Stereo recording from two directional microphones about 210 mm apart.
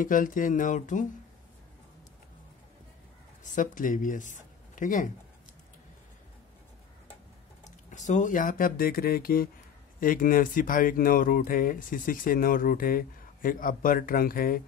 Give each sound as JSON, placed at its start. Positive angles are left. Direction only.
{"t": 0.0, "sound": "speech", "side_deg": 40}
{"t": 3.4, "sound": "speech", "side_deg": 40}
{"t": 7.9, "sound": "speech", "side_deg": 35}